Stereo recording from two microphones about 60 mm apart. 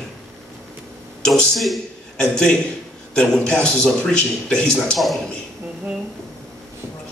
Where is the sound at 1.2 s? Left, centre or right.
Centre.